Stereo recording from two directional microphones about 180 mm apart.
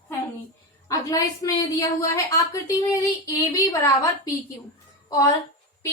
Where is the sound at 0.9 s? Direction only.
20° left (ahead or behind).